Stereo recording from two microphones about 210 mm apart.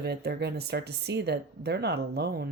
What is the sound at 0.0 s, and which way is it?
Speech, 50° right (ahead or behind).